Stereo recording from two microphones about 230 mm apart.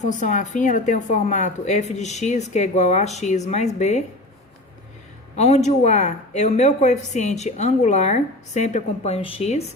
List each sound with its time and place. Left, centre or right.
0.0 s a woman's voice: left
5.4 s a woman's voice: left